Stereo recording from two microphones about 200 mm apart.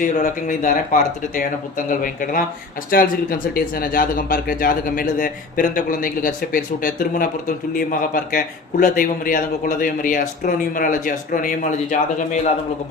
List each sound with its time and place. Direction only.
0.0 s speech: 40° left (ahead or behind)